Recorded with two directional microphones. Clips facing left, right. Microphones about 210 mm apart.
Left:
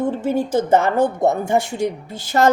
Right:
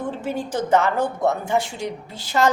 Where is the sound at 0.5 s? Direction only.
50° left (ahead or behind).